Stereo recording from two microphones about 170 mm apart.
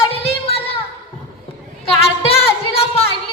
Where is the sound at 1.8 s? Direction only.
35° left (ahead or behind).